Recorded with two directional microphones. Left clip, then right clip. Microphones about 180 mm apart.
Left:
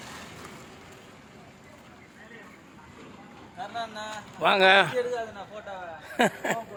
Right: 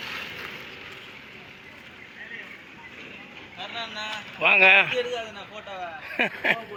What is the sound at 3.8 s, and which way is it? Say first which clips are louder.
Speech: right 3 dB; 50° left (ahead or behind).